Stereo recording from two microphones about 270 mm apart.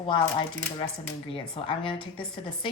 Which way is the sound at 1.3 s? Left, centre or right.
Centre.